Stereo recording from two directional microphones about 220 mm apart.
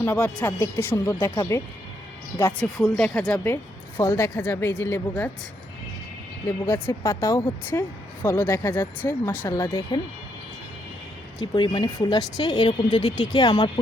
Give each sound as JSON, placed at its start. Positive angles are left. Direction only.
{"t": 0.0, "sound": "speech", "side_deg": 10}
{"t": 6.7, "sound": "speech", "side_deg": 10}
{"t": 11.3, "sound": "speech", "side_deg": 20}